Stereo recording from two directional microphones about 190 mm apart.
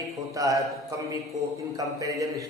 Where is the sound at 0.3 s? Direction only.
15° right (ahead or behind).